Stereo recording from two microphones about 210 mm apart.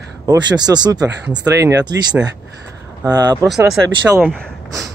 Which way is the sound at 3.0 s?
20° right (ahead or behind).